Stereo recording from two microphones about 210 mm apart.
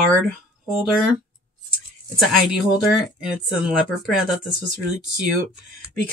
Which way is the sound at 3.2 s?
5° right (ahead or behind).